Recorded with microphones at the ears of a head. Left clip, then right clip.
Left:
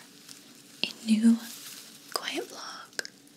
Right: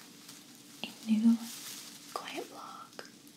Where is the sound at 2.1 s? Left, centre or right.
Left.